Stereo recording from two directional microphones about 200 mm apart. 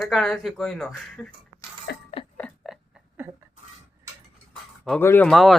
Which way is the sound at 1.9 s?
55° left (ahead or behind).